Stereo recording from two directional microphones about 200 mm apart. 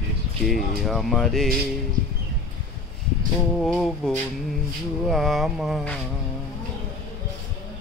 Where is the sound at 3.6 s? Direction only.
Centre (ahead or behind).